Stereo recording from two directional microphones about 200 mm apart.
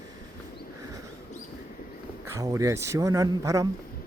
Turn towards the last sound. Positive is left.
turn(degrees=-15)  # may be behind; listen again after turning